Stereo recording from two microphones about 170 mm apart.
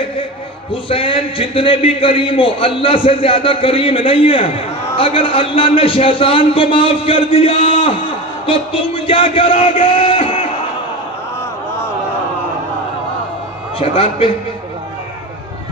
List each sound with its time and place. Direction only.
0.8 s a man's voice: 30° left (ahead or behind)
13.7 s a man's voice: 35° left (ahead or behind)